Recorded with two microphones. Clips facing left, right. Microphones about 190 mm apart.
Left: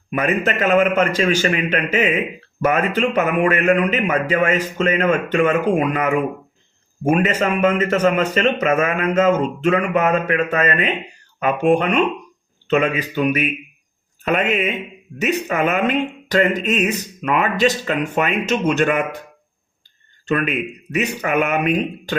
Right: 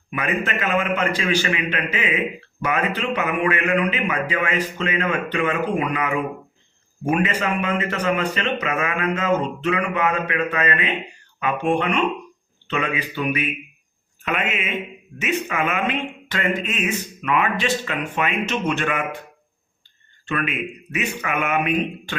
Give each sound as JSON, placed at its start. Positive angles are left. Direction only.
{"t": 0.1, "sound": "a man's voice", "side_deg": 40}
{"t": 20.2, "sound": "speech", "side_deg": 40}